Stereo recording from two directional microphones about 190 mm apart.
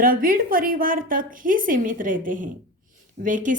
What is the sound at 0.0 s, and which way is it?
A woman's voice, 50° right (ahead or behind).